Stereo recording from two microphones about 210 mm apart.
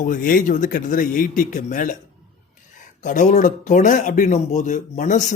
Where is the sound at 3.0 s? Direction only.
35° left (ahead or behind).